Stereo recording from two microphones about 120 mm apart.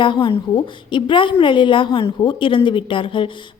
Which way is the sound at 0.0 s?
40° left (ahead or behind).